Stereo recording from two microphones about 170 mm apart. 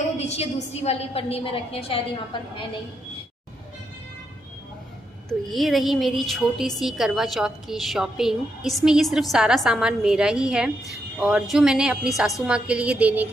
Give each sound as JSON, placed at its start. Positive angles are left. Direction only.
{"t": 0.2, "sound": "a woman's voice", "side_deg": 40}
{"t": 5.5, "sound": "a woman's voice", "side_deg": 0}